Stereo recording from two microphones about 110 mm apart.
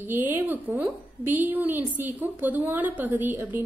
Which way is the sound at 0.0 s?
20° right (ahead or behind).